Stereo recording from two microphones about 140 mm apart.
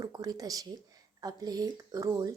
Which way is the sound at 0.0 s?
25° right (ahead or behind).